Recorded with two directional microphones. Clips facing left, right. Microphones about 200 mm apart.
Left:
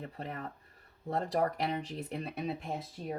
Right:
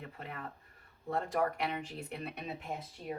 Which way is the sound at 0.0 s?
35° left (ahead or behind).